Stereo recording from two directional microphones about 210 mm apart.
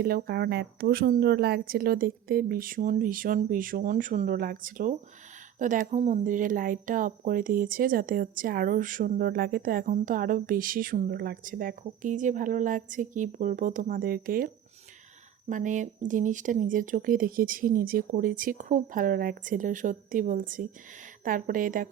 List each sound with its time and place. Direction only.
0.0 s speech: 45° right (ahead or behind)